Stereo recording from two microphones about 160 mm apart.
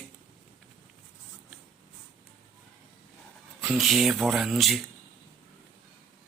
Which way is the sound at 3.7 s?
Centre (ahead or behind).